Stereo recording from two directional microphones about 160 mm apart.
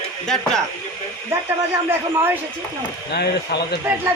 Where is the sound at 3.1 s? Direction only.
90° left.